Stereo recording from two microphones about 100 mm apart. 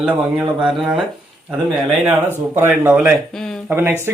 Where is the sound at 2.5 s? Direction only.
20° right (ahead or behind).